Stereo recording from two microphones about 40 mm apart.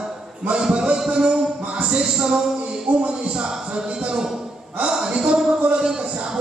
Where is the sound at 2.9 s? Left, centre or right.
Right.